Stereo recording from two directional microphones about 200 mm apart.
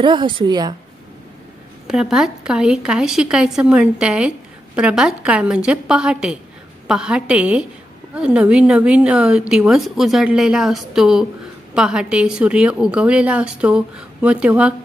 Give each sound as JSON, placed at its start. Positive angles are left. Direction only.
{"t": 0.0, "sound": "a woman's voice", "side_deg": -25}
{"t": 1.9, "sound": "a woman's voice", "side_deg": 0}